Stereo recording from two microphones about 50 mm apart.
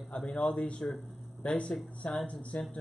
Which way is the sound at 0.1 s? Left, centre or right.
Left.